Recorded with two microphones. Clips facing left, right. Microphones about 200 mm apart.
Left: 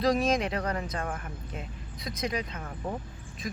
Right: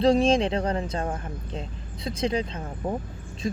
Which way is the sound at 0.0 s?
30° right (ahead or behind).